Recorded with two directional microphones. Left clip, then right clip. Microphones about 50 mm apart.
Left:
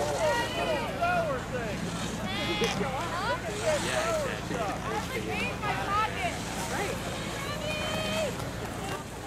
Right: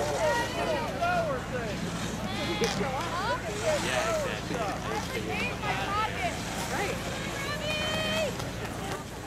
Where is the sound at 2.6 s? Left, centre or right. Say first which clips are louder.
Right 1 dB; centre.